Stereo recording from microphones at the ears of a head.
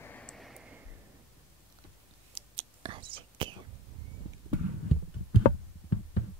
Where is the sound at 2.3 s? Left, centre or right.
Right.